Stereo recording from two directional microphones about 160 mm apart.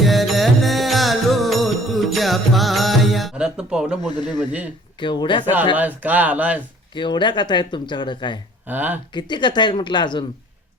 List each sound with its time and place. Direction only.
0.0 s music: centre (ahead or behind)
4.0 s speech: 25° left (ahead or behind)
5.7 s speech: 10° right (ahead or behind)
6.9 s speech: 30° left (ahead or behind)
8.6 s speech: 10° right (ahead or behind)
9.1 s speech: 30° left (ahead or behind)